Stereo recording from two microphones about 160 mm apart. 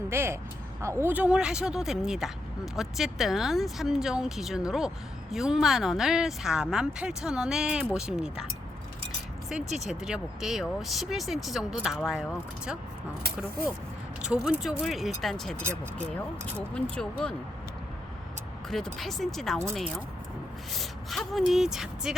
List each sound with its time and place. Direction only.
0.1 s a woman's voice: 15° right (ahead or behind)
9.5 s a woman's voice: 5° right (ahead or behind)
14.2 s a woman's voice: 5° right (ahead or behind)
18.9 s a woman's voice: centre (ahead or behind)